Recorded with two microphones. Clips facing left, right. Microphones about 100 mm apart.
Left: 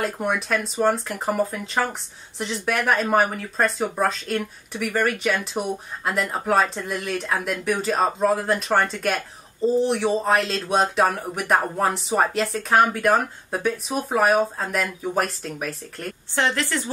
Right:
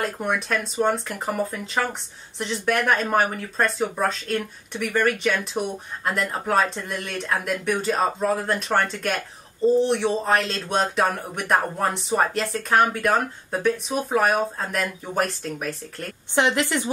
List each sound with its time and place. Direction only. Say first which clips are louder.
0.0 s speech: left 1 dB; centre (ahead or behind)
16.3 s a woman's voice: right 2 dB; 15° right (ahead or behind)